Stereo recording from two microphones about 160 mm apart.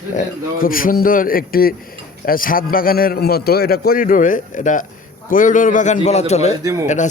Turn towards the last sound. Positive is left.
turn(degrees=50)  # may be behind; listen again after turning